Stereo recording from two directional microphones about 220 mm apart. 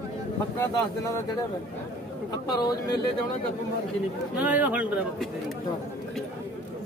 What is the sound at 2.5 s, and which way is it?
Speech, 15° left (ahead or behind).